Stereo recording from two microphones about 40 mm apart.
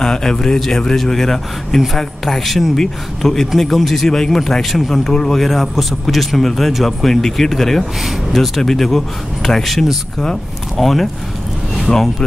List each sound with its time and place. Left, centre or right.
0.0 s speech: centre